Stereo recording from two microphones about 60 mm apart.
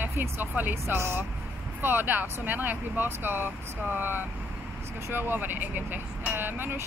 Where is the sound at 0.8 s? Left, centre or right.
Right.